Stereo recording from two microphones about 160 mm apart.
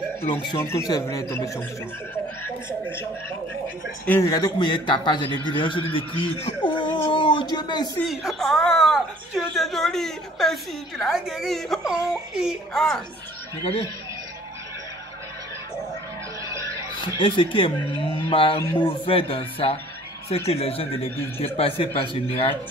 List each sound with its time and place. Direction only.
0.8 s a man's voice: 20° left (ahead or behind)
4.2 s a man's voice: 25° left (ahead or behind)
8.0 s a woman's voice: centre (ahead or behind)
17.0 s speech: 30° left (ahead or behind)